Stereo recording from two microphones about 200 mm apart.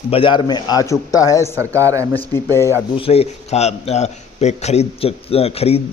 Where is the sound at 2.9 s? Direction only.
30° left (ahead or behind).